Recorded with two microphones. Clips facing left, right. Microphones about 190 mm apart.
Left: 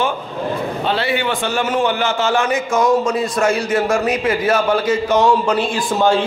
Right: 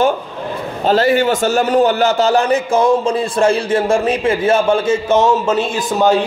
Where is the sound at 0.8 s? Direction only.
45° right (ahead or behind).